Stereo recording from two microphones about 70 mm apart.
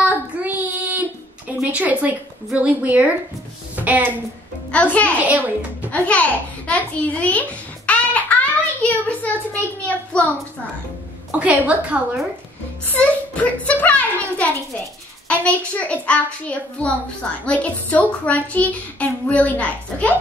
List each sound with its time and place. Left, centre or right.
0.0 s child singing: right
1.6 s a woman's voice: centre
3.7 s a sound: right
4.6 s a child's voice: centre
5.2 s a woman's voice: right
5.9 s a child's voice: centre
6.7 s a sound: centre
10.1 s a child's voice: centre
11.3 s a woman's voice: centre
12.9 s a child's voice: left
15.2 s a child's voice: centre